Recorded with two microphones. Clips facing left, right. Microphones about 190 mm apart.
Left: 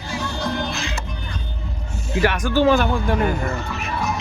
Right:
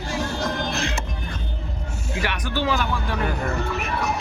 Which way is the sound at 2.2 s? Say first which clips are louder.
Left 9 dB; 45° left (ahead or behind).